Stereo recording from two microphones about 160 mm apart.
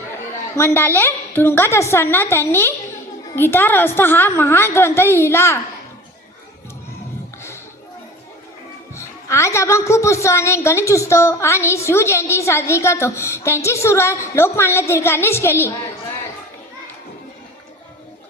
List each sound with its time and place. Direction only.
0.5 s a woman's voice: 15° left (ahead or behind)
9.0 s a woman's voice: 15° left (ahead or behind)